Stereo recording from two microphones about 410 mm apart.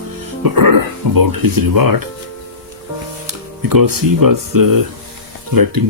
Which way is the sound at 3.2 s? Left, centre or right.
Right.